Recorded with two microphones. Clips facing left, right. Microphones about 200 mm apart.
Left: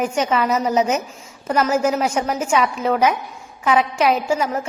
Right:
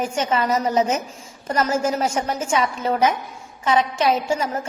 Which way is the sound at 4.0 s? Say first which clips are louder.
Left 2 dB; 30° right (ahead or behind).